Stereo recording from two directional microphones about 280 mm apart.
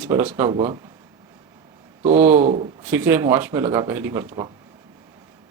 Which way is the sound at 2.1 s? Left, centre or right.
Centre.